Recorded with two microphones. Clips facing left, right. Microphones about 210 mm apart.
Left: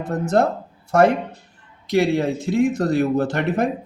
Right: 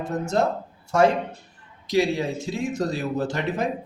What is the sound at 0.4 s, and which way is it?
Speech, 60° left (ahead or behind).